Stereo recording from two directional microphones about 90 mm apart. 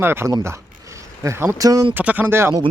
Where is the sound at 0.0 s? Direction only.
25° right (ahead or behind).